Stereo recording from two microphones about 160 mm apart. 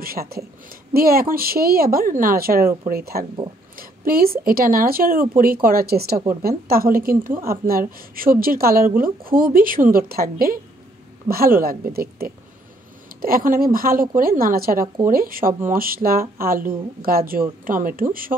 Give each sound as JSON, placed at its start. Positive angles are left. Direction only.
{"t": 0.0, "sound": "speech", "side_deg": -70}